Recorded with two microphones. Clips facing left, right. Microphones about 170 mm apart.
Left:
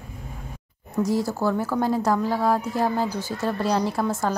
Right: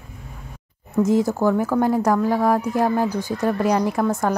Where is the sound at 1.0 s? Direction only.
20° right (ahead or behind).